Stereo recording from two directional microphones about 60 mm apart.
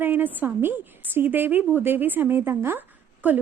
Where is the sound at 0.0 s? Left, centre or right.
Right.